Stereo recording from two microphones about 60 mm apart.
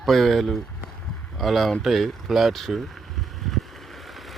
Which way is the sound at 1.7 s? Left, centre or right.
Centre.